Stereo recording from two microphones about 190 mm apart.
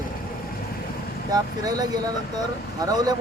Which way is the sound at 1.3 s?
20° right (ahead or behind).